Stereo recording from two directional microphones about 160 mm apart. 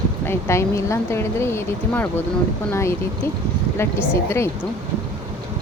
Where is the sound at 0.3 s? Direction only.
15° left (ahead or behind).